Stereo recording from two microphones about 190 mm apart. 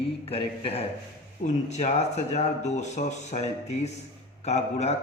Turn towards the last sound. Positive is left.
turn(degrees=35)  # may be behind; listen again after turning